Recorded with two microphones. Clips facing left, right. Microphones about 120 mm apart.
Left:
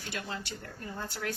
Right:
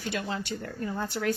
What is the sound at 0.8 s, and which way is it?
Speech, 90° right.